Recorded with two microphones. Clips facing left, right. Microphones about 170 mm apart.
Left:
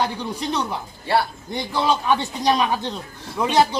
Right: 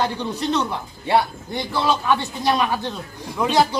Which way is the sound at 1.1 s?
20° right (ahead or behind).